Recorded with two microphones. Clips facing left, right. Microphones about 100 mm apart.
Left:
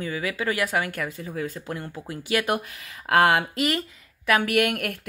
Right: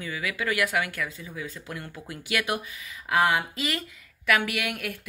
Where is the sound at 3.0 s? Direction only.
65° left (ahead or behind).